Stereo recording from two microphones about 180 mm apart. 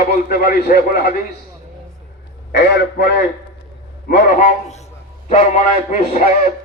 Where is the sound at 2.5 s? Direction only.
65° left (ahead or behind).